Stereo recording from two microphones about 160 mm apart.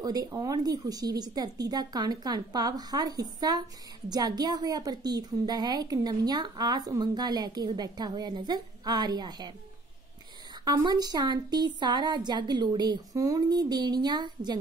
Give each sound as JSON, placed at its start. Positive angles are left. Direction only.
{"t": 0.0, "sound": "a woman's voice", "side_deg": -25}
{"t": 10.6, "sound": "a woman's voice", "side_deg": -25}